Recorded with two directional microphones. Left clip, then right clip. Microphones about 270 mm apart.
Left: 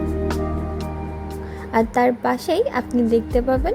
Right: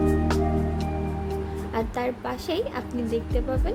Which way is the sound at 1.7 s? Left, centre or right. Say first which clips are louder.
Left 11 dB; left.